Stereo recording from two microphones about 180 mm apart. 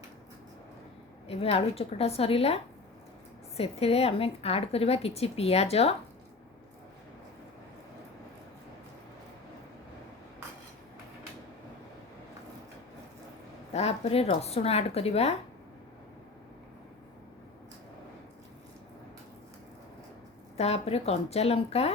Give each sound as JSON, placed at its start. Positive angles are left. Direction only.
{"t": 1.3, "sound": "a woman's voice", "side_deg": 35}
{"t": 3.6, "sound": "a woman's voice", "side_deg": 35}
{"t": 13.7, "sound": "a woman's voice", "side_deg": 35}
{"t": 20.6, "sound": "a woman's voice", "side_deg": 35}